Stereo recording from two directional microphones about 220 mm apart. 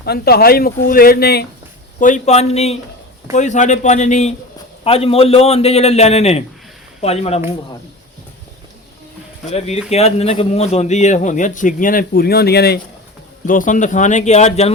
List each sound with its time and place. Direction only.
0.0 s speech: 45° left (ahead or behind)
2.0 s a man's voice: 35° left (ahead or behind)
9.5 s a man's voice: 30° left (ahead or behind); by 12.8 s 45° left (ahead or behind)
13.5 s a man's voice: 35° left (ahead or behind)